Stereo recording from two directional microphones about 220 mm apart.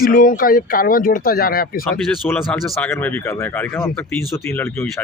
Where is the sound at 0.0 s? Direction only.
40° left (ahead or behind).